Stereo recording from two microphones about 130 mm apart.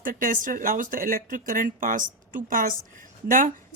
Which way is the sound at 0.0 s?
90° right.